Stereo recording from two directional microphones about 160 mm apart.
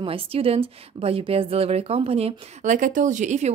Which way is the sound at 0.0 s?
35° right (ahead or behind).